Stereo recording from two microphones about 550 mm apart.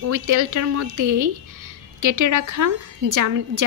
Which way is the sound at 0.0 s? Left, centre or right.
Right.